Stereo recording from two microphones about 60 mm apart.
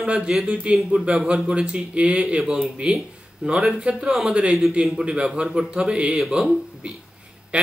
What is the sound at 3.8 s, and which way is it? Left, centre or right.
Speech, centre.